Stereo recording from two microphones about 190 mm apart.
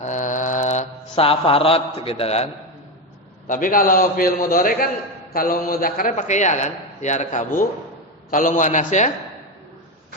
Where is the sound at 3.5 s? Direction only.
45° left (ahead or behind).